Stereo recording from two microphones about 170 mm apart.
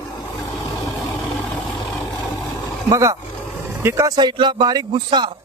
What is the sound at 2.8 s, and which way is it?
Speech, 20° right (ahead or behind).